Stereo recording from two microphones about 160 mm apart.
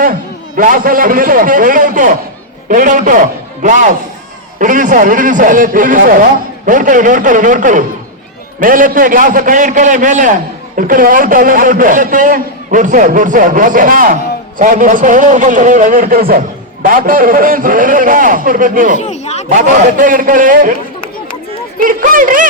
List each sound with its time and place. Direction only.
0.0 s a man's voice: 60° right (ahead or behind)
18.9 s a sound: 45° left (ahead or behind)
19.5 s a man's voice: 50° right (ahead or behind)
21.8 s a man's voice: 60° right (ahead or behind)